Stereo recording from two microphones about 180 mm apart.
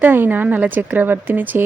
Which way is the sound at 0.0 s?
10° right (ahead or behind).